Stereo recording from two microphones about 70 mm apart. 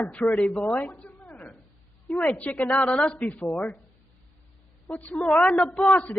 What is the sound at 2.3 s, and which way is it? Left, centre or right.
A man's voice, left.